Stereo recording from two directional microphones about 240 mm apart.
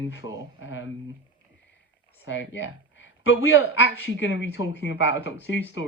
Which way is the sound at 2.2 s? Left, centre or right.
Left.